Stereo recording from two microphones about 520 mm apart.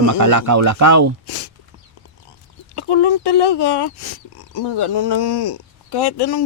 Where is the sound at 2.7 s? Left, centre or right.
Left.